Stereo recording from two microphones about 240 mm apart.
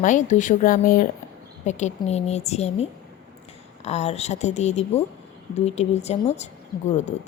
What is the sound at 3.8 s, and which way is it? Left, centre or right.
A woman's voice, left.